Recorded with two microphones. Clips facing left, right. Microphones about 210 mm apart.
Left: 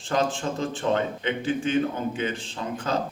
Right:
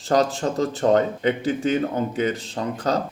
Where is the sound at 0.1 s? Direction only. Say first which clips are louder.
Right 5 dB; 40° right (ahead or behind).